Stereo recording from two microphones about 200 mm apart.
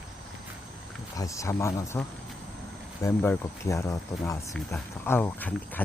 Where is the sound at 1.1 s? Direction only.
15° left (ahead or behind).